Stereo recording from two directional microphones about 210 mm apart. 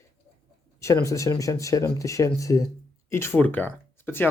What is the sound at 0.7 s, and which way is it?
Speech, 15° left (ahead or behind).